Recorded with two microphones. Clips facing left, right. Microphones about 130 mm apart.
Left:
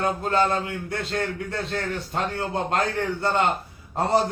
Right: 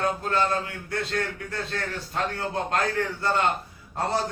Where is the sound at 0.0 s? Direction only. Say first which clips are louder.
Left 3 dB; 25° left (ahead or behind).